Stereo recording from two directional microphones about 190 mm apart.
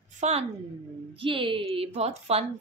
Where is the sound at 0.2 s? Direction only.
35° right (ahead or behind).